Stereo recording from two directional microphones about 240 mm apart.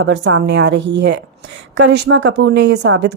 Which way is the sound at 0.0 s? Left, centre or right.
Right.